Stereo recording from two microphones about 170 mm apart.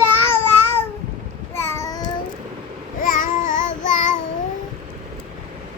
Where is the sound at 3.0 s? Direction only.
55° left (ahead or behind).